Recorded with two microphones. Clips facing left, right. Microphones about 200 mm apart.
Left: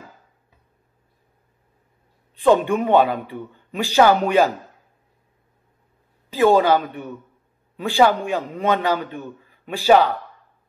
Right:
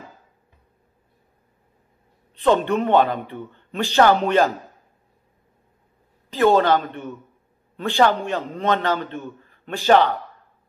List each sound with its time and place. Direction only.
2.4 s a man's voice: 10° left (ahead or behind)
6.3 s a man's voice: 10° left (ahead or behind)